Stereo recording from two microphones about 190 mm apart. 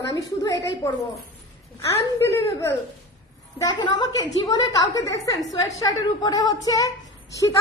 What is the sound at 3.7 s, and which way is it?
A woman's voice, 25° left (ahead or behind).